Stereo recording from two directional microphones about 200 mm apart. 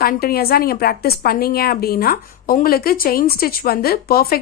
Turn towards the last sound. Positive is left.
turn(degrees=50)  # may be behind; listen again after turning